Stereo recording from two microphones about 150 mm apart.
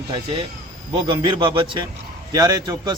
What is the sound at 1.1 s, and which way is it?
Speech, 35° right (ahead or behind).